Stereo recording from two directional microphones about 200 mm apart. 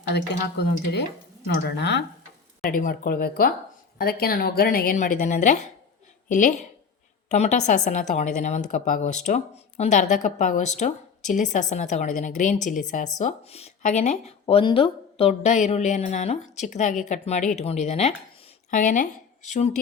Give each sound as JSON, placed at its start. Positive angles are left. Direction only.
{"t": 0.3, "sound": "speech", "side_deg": 55}
{"t": 2.6, "sound": "a woman's voice", "side_deg": 45}